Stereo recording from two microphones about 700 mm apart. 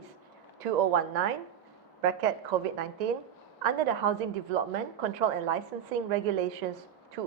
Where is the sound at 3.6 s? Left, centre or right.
Right.